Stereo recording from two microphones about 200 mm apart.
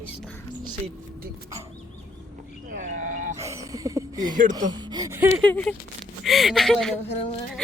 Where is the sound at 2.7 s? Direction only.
40° right (ahead or behind).